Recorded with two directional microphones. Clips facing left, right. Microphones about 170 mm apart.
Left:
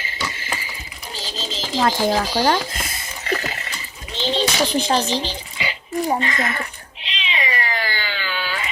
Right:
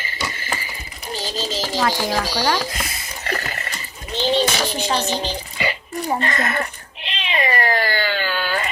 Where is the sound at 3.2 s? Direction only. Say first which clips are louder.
Left 2 dB; 50° right (ahead or behind).